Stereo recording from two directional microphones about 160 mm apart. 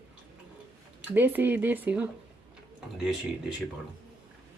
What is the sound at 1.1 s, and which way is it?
Speech, 10° right (ahead or behind).